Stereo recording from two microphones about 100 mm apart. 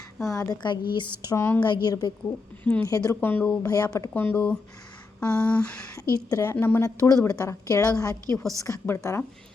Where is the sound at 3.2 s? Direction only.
20° left (ahead or behind).